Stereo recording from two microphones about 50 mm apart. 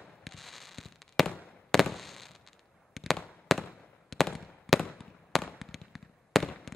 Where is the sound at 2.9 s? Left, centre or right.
Centre.